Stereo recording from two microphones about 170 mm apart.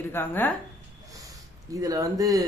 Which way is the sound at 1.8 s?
20° right (ahead or behind).